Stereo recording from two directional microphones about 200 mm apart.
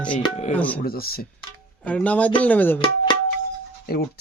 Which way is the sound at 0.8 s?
50° left (ahead or behind).